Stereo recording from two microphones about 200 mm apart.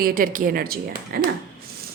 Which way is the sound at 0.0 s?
45° right (ahead or behind).